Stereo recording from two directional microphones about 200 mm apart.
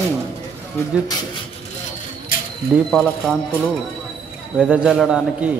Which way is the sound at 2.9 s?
5° left (ahead or behind).